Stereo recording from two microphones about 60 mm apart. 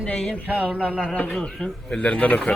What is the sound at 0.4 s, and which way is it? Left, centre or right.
Speech, right.